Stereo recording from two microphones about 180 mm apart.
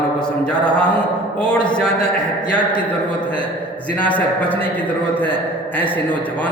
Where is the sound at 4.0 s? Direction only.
10° left (ahead or behind).